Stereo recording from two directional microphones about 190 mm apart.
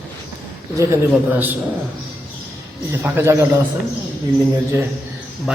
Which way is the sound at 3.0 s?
10° right (ahead or behind).